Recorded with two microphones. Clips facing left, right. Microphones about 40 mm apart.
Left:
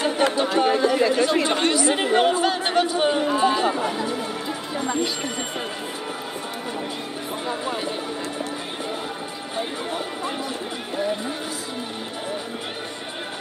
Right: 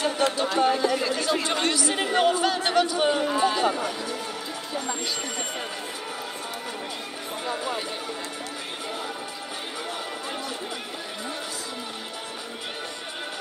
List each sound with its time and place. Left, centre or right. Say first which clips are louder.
0.0 s a sound: left 3 dB; left
0.6 s chatter: left 4 dB; left
3.8 s speech: left 5 dB; left
7.4 s speech: left 1 dB; left